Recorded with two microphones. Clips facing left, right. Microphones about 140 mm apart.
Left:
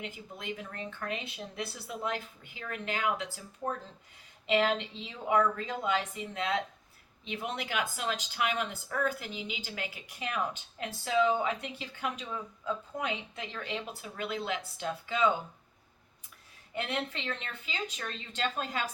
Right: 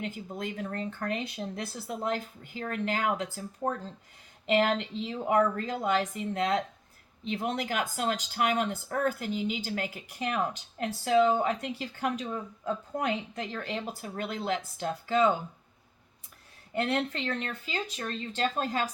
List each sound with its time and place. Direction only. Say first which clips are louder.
0.0 s speech: right 6 dB; 45° right (ahead or behind)
16.7 s speech: right 6 dB; 40° right (ahead or behind)